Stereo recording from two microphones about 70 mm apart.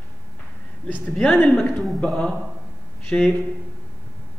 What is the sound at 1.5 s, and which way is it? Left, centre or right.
Speech, centre.